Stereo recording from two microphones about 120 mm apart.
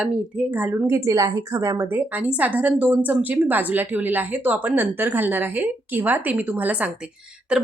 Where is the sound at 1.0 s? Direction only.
30° right (ahead or behind).